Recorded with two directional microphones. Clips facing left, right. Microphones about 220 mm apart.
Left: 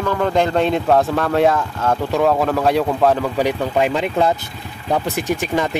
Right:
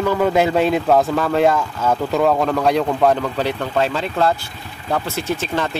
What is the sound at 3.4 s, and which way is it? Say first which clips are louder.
Speech: left 2 dB; 15° left (ahead or behind).